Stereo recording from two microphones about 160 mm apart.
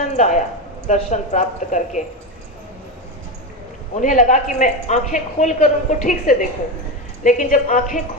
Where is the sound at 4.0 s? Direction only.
50° left (ahead or behind).